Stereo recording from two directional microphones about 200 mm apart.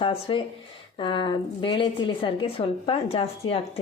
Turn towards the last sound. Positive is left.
turn(degrees=30)  # may be behind; listen again after turning